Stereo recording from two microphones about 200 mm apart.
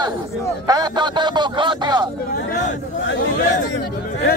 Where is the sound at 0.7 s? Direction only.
20° right (ahead or behind).